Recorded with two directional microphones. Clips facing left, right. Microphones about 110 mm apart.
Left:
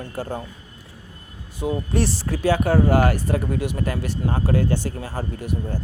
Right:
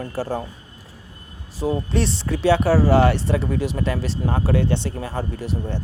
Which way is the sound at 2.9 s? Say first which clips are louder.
Right 2 dB; 30° right (ahead or behind).